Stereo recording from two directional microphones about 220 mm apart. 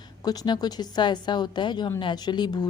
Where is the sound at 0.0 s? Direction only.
15° left (ahead or behind).